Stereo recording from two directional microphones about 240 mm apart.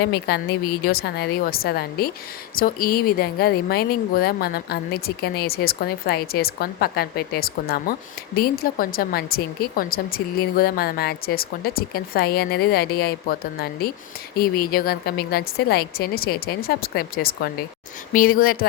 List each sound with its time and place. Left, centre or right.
0.0 s speech: left